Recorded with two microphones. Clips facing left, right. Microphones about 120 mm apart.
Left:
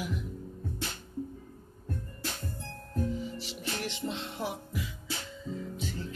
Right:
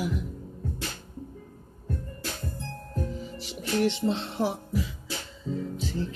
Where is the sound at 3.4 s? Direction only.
40° right (ahead or behind).